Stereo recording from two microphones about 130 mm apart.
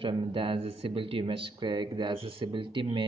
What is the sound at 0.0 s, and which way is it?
Speech, 40° right (ahead or behind).